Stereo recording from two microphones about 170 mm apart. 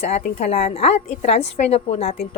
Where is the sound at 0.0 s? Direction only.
40° left (ahead or behind).